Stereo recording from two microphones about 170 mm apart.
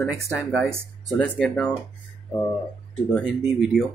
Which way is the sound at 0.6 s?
Centre (ahead or behind).